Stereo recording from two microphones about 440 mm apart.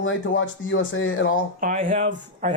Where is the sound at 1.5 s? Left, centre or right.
Centre.